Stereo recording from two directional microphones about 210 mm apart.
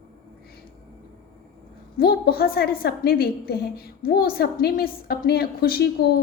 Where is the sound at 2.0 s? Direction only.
50° left (ahead or behind).